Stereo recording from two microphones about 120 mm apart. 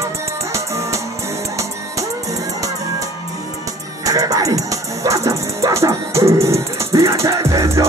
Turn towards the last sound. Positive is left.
turn(degrees=-25)  # may be behind; listen again after turning